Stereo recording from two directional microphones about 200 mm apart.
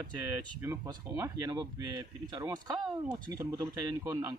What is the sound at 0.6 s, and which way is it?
Speech, 15° right (ahead or behind).